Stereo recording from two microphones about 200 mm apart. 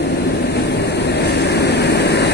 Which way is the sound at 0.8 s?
55° left (ahead or behind).